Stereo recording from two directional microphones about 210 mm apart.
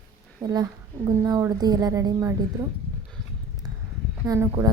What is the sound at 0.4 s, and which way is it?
A woman's voice, 15° right (ahead or behind).